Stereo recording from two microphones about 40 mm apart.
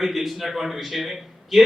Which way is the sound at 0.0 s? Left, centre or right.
Centre.